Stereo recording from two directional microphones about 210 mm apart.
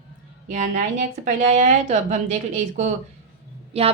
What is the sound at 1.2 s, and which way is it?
A woman's voice, 35° right (ahead or behind).